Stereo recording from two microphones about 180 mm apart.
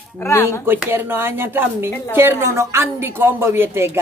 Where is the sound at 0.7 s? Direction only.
10° right (ahead or behind).